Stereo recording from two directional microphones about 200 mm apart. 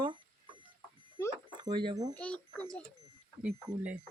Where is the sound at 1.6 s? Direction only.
25° right (ahead or behind).